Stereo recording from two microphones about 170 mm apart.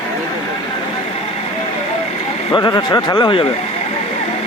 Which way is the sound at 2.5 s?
25° left (ahead or behind).